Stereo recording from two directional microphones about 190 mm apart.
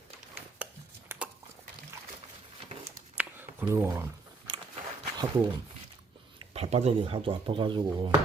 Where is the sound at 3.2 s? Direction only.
10° right (ahead or behind).